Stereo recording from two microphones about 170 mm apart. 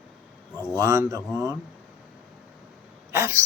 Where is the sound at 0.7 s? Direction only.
20° right (ahead or behind).